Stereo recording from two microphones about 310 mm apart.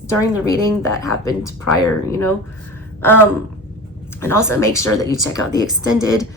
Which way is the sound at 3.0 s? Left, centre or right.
Centre.